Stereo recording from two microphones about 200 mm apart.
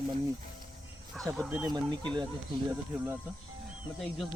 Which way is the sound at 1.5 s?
20° right (ahead or behind).